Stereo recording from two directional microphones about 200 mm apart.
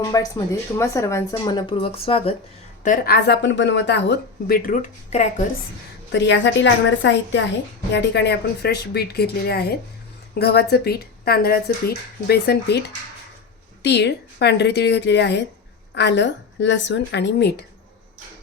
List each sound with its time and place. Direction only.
0.0 s speech: 15° left (ahead or behind)
2.8 s speech: 45° left (ahead or behind)
6.1 s a woman's voice: 65° left (ahead or behind)
13.8 s a woman's voice: 60° left (ahead or behind)